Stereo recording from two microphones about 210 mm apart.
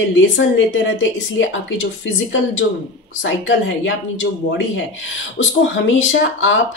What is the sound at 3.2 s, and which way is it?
Speech, 65° left (ahead or behind).